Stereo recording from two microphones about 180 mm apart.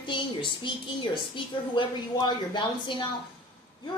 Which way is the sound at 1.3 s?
25° left (ahead or behind).